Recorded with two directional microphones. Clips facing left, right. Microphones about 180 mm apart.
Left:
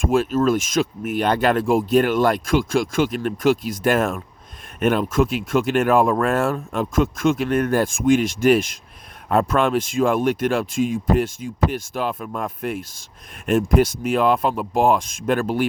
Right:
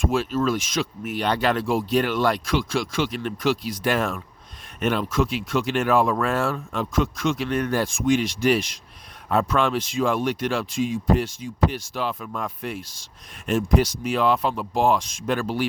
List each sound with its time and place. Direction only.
0.0 s speech: 50° left (ahead or behind)